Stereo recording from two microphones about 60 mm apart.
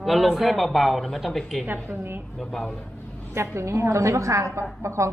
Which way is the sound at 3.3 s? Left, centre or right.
Right.